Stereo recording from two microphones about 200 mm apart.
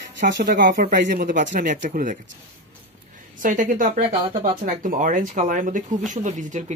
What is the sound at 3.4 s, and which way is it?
Speech, 40° right (ahead or behind).